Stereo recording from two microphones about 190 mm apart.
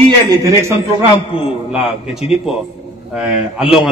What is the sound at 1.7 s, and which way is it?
A man's voice, centre (ahead or behind).